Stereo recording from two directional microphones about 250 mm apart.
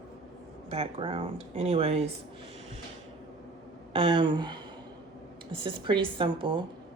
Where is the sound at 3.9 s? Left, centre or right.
Right.